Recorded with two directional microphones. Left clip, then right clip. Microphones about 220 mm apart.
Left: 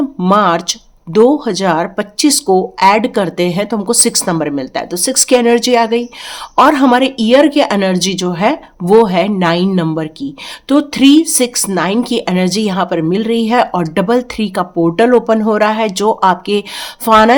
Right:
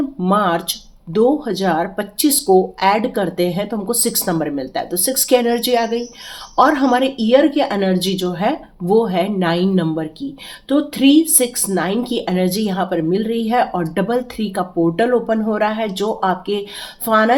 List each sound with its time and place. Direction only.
0.2 s speech: 35° left (ahead or behind)